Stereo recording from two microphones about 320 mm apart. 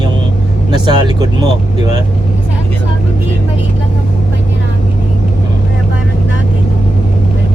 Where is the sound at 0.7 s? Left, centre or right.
Centre.